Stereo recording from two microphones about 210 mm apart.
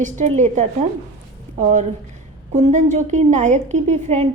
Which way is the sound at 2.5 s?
35° right (ahead or behind).